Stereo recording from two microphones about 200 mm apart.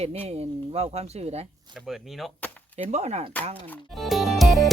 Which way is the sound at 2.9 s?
30° right (ahead or behind).